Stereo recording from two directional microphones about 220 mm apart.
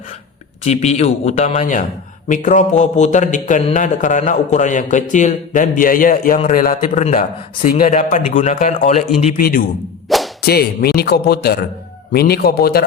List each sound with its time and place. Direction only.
0.6 s a man's voice: 30° left (ahead or behind)
10.1 s whip: centre (ahead or behind)
10.4 s speech: 45° left (ahead or behind)